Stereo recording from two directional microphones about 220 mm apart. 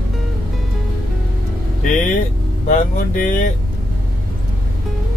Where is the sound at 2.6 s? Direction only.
40° left (ahead or behind).